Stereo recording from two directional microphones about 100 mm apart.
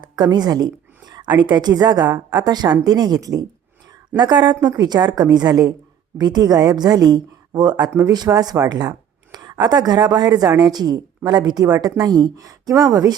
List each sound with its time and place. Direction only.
0.0 s a woman's voice: 45° right (ahead or behind)